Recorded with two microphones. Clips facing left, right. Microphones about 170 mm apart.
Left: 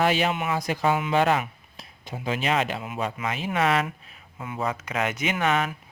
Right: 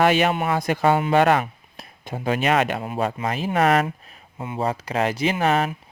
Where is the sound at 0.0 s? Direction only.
65° right (ahead or behind).